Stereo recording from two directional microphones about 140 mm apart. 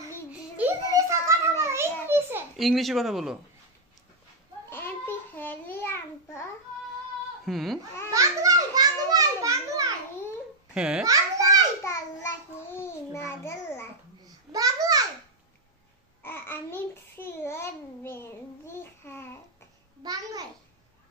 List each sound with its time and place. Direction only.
0.3 s child singing: 10° right (ahead or behind)
1.0 s children playing: 25° right (ahead or behind)
2.5 s speech: centre (ahead or behind)
4.6 s a sound: 15° left (ahead or behind)
7.4 s speech: centre (ahead or behind)
8.1 s children playing: 25° right (ahead or behind)
10.7 s a child's voice: 5° right (ahead or behind)
11.1 s a sound: 25° right (ahead or behind)
11.8 s child singing: 20° left (ahead or behind)
14.5 s a sound: 25° right (ahead or behind)
16.2 s babbling: 15° left (ahead or behind)
20.0 s a sound: 25° right (ahead or behind)